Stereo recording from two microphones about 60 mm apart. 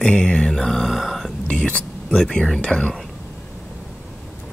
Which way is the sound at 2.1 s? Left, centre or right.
Centre.